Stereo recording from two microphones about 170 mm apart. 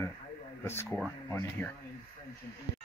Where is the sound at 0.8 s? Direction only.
Centre (ahead or behind).